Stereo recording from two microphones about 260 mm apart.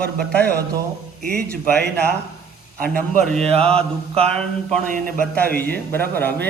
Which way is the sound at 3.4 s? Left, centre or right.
Right.